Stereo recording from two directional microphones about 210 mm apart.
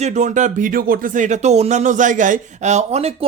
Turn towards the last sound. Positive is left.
turn(degrees=-30)  # may be behind; listen again after turning